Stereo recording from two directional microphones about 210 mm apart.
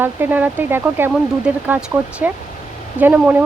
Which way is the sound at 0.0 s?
10° right (ahead or behind).